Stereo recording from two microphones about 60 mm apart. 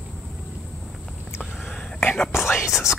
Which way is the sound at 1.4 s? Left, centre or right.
Left.